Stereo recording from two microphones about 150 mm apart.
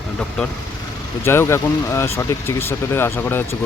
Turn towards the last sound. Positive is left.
turn(degrees=15)  # may be behind; listen again after turning